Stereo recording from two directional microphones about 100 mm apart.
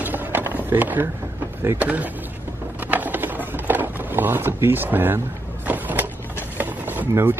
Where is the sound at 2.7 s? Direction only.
15° right (ahead or behind).